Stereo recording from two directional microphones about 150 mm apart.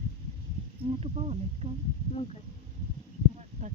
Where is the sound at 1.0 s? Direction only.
45° right (ahead or behind).